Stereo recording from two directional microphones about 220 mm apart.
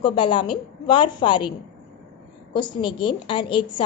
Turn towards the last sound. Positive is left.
turn(degrees=20)  # may be behind; listen again after turning